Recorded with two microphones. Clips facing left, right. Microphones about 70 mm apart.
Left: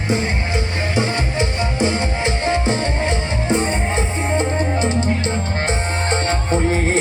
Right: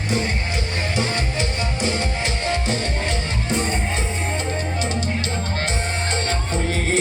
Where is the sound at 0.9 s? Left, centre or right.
Left.